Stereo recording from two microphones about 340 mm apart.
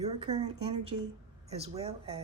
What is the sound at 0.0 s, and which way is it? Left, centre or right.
A woman's voice, centre.